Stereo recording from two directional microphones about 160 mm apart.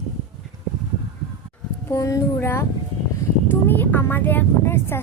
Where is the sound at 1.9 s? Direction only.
20° left (ahead or behind).